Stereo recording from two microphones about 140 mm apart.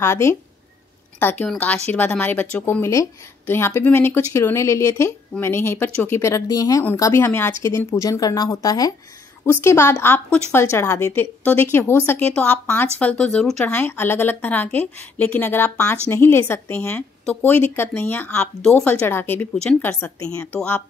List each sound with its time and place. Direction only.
0.0 s a woman's voice: 20° left (ahead or behind)
20.5 s a woman's voice: 10° left (ahead or behind)